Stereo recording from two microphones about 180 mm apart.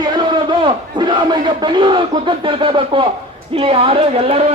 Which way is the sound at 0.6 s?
25° right (ahead or behind).